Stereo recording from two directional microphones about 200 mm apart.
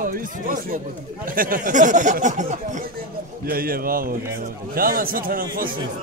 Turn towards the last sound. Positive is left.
turn(degrees=-45)  # may be behind; listen again after turning